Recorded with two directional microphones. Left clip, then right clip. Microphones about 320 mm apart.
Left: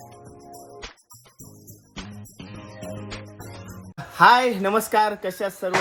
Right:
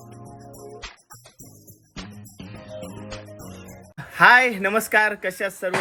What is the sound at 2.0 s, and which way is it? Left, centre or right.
Music, centre.